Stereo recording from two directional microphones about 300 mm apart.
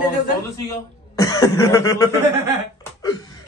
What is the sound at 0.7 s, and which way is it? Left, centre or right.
Cough, centre.